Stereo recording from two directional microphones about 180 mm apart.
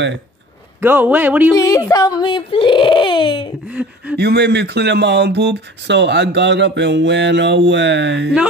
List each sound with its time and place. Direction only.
0.7 s a man's voice: 10° right (ahead or behind)
1.5 s speech: 20° left (ahead or behind)
3.6 s a man's voice: 5° right (ahead or behind)
4.2 s speech: 65° right (ahead or behind)